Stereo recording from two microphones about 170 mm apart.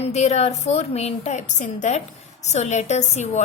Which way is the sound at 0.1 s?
40° left (ahead or behind).